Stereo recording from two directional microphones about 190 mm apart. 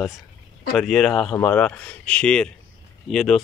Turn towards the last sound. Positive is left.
turn(degrees=0)  # may be behind; listen again after turning